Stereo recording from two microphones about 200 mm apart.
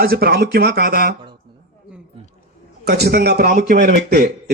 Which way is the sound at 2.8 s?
50° right (ahead or behind).